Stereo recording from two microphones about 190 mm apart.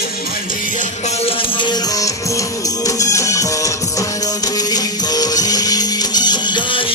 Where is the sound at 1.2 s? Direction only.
25° left (ahead or behind).